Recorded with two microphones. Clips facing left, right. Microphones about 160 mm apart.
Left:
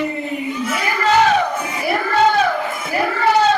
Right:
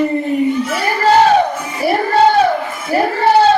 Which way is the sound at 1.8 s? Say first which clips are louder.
Right 5 dB; 30° right (ahead or behind).